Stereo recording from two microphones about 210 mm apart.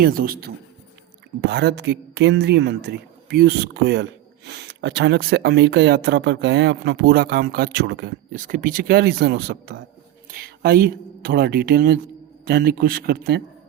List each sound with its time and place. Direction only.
0.0 s speech: 45° right (ahead or behind)